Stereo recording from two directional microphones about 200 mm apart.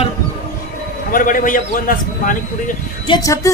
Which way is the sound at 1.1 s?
40° left (ahead or behind).